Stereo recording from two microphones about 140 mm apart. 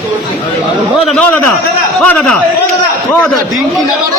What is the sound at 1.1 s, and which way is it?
A man's voice, 10° left (ahead or behind).